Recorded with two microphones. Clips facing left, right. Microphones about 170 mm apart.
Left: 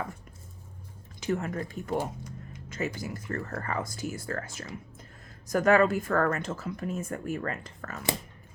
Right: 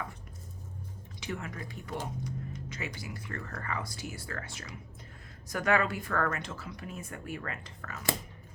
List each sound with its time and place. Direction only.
1.2 s speech: 45° left (ahead or behind)